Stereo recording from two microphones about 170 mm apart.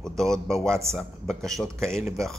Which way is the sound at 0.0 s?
5° left (ahead or behind).